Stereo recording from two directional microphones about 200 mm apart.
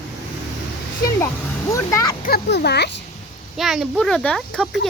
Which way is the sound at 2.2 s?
55° left (ahead or behind).